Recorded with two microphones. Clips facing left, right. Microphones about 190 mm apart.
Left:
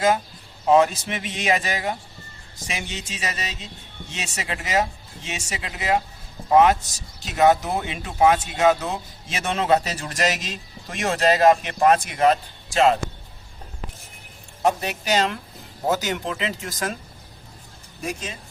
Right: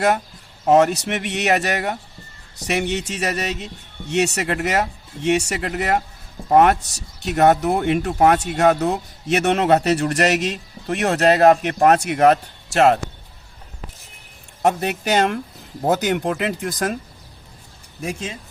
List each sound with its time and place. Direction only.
0.6 s speech: 65° right (ahead or behind)
14.6 s speech: 60° right (ahead or behind)